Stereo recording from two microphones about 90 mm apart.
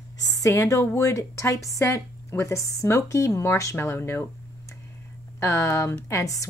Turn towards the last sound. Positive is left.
turn(degrees=35)  # may be behind; listen again after turning